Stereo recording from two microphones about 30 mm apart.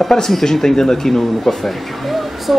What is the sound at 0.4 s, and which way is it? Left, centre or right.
Speech, centre.